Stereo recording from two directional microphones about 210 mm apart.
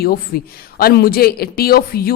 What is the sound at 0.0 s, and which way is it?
Speech, 45° left (ahead or behind).